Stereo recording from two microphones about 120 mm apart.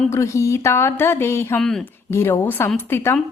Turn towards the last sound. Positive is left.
turn(degrees=20)  # may be behind; listen again after turning